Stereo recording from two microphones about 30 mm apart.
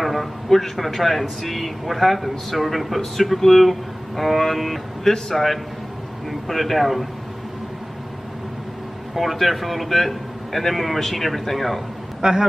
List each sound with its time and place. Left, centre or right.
0.0 s speech: centre
9.1 s speech: centre
12.2 s speech: centre